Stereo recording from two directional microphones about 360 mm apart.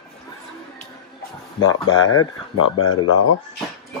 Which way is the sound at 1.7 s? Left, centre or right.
Left.